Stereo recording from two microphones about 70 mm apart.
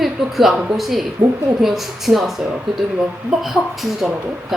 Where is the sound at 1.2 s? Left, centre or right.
Right.